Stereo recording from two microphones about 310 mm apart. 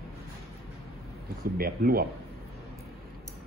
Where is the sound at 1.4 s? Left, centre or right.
Right.